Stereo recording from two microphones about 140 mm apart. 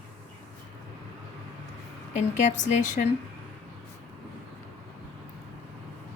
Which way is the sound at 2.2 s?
60° left (ahead or behind).